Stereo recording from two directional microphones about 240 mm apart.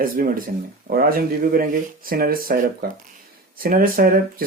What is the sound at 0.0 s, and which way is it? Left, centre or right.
Speech, right.